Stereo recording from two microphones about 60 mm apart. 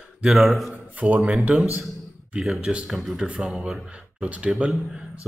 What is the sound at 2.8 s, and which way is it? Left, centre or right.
A man's voice, centre.